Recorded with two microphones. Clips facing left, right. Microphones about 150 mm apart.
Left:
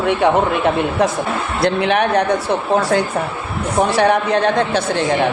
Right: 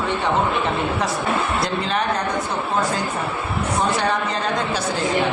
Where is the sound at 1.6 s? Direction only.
65° left (ahead or behind).